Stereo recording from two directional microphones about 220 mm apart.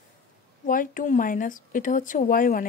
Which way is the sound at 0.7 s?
40° left (ahead or behind).